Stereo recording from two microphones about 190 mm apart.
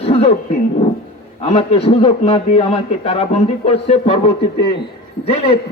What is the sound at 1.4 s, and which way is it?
A man's voice, 30° left (ahead or behind).